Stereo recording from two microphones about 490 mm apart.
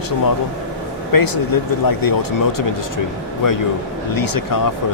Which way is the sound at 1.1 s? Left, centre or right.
Left.